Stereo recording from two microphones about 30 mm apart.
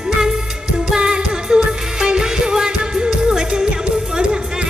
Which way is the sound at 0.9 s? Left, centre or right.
Right.